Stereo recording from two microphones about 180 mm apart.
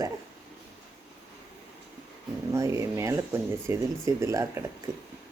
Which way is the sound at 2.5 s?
15° right (ahead or behind).